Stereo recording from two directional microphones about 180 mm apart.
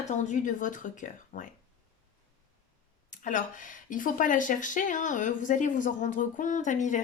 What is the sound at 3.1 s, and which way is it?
Speech, 45° left (ahead or behind).